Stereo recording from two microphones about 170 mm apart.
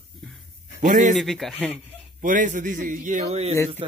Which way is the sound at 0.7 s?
45° right (ahead or behind).